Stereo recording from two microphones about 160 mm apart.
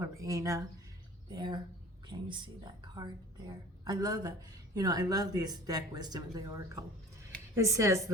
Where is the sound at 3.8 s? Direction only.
25° right (ahead or behind).